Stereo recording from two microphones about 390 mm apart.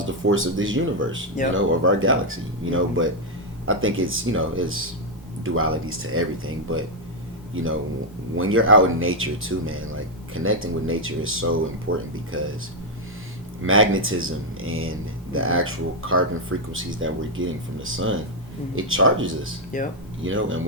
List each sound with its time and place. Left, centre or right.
0.0 s speech: right
13.7 s speech: right
19.7 s speech: centre
20.2 s speech: right